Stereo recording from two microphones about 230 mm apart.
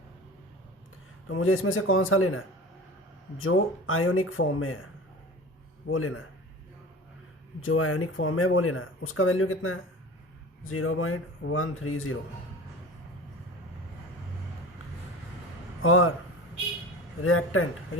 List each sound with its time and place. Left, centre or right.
1.3 s speech: left
3.4 s speech: left
5.9 s speech: left
7.6 s speech: left
15.8 s speech: left
17.2 s speech: left